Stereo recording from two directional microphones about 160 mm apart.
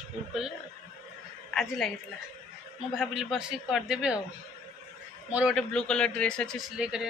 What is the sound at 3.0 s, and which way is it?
A woman's voice, 5° right (ahead or behind).